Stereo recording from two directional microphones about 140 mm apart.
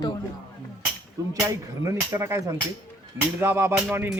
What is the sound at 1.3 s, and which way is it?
Speech, 20° right (ahead or behind).